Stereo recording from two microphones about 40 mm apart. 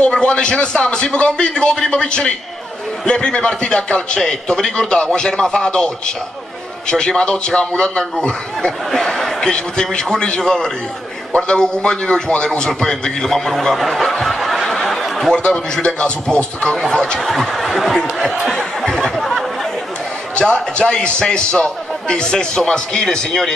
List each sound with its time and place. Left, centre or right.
0.0 s a man's voice: left
8.9 s a man's voice: centre
14.2 s snicker: centre
15.3 s a man's voice: left
17.2 s a man's voice: centre
18.9 s a sound: centre
19.1 s a sound: centre
20.3 s a man's voice: left